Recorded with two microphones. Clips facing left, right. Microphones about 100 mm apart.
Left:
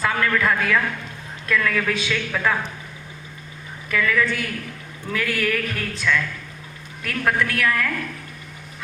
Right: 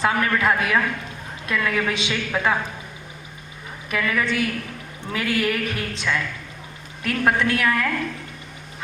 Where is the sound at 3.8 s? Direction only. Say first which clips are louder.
Left 2 dB; 20° right (ahead or behind).